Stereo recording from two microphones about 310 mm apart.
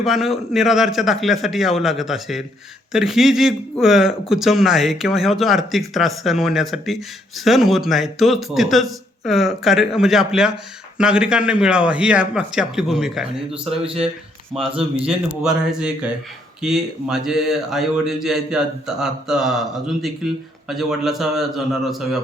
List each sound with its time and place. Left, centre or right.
0.0 s a man's voice: centre
13.7 s speech: centre
14.8 s a man's voice: centre